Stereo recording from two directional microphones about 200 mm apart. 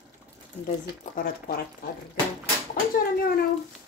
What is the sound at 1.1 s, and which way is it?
Speech, 50° left (ahead or behind).